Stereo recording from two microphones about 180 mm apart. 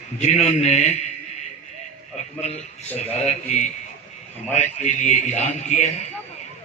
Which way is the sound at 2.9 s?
40° left (ahead or behind).